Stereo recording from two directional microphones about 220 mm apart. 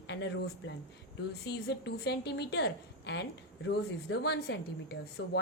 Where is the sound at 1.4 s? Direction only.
50° left (ahead or behind).